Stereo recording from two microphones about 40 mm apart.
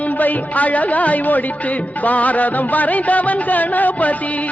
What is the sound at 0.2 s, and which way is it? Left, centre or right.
Music, left.